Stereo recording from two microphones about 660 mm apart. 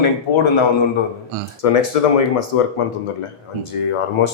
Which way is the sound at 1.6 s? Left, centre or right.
Left.